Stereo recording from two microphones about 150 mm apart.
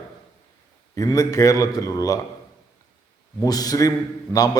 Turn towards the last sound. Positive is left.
turn(degrees=25)  # may be behind; listen again after turning